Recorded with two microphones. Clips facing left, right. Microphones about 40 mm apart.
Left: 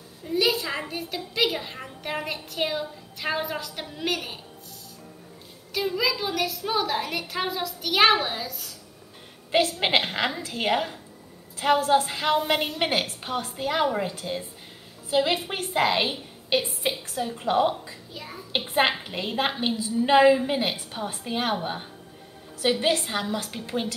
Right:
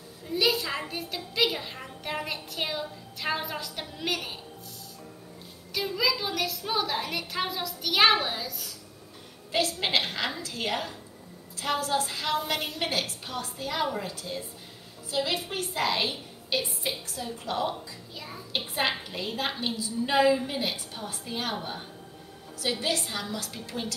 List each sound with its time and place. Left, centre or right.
0.3 s a woman's voice: centre
5.7 s a woman's voice: centre
9.5 s a woman's voice: left
18.1 s a woman's voice: centre
18.7 s a woman's voice: left
22.6 s a woman's voice: left